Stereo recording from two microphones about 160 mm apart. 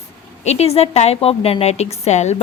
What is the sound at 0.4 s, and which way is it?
A woman's voice, 40° left (ahead or behind).